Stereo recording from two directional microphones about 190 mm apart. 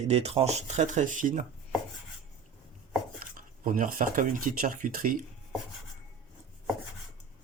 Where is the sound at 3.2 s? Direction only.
45° right (ahead or behind).